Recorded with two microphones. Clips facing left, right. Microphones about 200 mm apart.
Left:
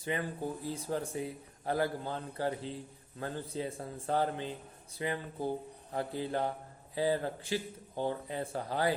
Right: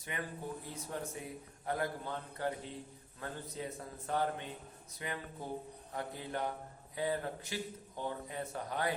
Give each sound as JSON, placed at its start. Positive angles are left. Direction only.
{"t": 0.1, "sound": "a man's voice", "side_deg": 30}